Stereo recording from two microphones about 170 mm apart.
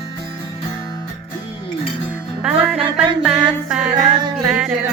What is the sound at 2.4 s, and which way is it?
Music, 5° right (ahead or behind).